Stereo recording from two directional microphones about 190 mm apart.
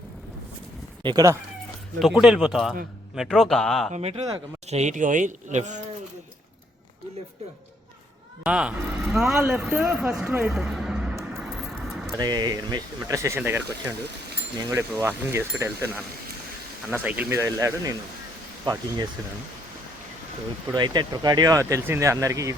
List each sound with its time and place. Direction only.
1.0 s speech: 20° right (ahead or behind)
2.0 s speech: centre (ahead or behind)
3.9 s speech: 35° right (ahead or behind)
8.4 s speech: 5° right (ahead or behind)
12.1 s speech: 20° right (ahead or behind)
20.7 s speech: 25° right (ahead or behind)